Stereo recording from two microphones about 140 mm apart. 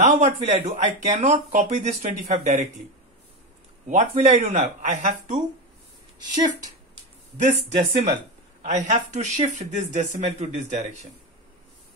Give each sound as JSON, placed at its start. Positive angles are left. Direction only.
{"t": 0.0, "sound": "speech", "side_deg": -55}
{"t": 3.8, "sound": "speech", "side_deg": -60}
{"t": 6.1, "sound": "speech", "side_deg": -30}
{"t": 7.3, "sound": "speech", "side_deg": -60}